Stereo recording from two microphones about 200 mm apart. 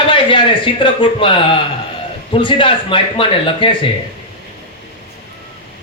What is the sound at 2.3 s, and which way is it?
Speech, 25° left (ahead or behind).